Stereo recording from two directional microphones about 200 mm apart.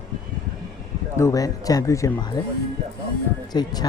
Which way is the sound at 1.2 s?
15° left (ahead or behind).